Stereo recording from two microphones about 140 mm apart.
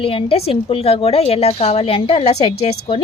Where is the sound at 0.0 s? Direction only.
40° left (ahead or behind).